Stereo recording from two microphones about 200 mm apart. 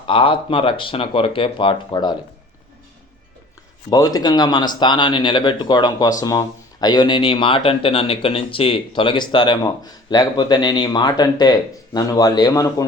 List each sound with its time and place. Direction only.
0.1 s speech: 25° left (ahead or behind)
3.8 s speech: 20° left (ahead or behind)